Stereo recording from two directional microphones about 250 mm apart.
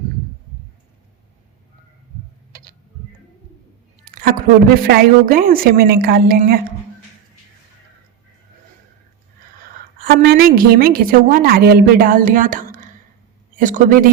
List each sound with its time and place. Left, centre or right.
4.0 s a sound: right
4.9 s a woman's voice: right
10.0 s a woman's voice: right